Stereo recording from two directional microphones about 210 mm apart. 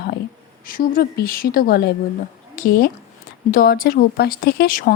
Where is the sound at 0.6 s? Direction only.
45° left (ahead or behind).